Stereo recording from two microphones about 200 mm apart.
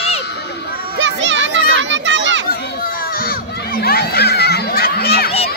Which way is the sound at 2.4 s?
45° left (ahead or behind).